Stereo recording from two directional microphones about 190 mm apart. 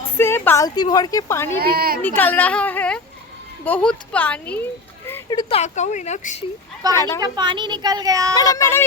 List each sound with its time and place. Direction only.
0.2 s a woman's voice: 10° left (ahead or behind)
1.6 s a woman's voice: 50° right (ahead or behind)
2.0 s a woman's voice: 10° left (ahead or behind)
5.3 s speech: 25° left (ahead or behind)
6.9 s a woman's voice: 15° left (ahead or behind)
7.2 s speech: 25° right (ahead or behind)
8.4 s a woman's voice: 15° left (ahead or behind)